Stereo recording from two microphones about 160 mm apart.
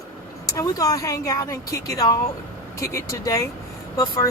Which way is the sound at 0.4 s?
20° left (ahead or behind).